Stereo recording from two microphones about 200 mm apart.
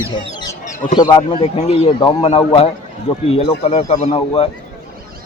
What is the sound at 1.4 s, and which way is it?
Speech, 30° left (ahead or behind).